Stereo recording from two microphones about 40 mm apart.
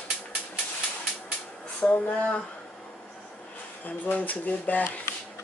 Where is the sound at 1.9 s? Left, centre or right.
Left.